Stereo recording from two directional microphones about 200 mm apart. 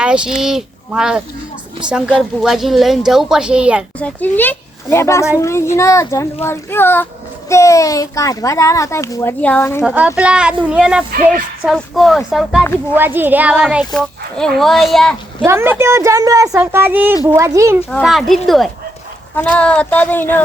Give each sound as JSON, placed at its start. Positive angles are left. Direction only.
{"t": 0.0, "sound": "speech", "side_deg": -5}
{"t": 4.0, "sound": "a child's voice", "side_deg": 10}
{"t": 9.8, "sound": "a woman's voice", "side_deg": -5}
{"t": 15.4, "sound": "a woman's voice", "side_deg": -10}
{"t": 17.9, "sound": "a child's voice", "side_deg": 0}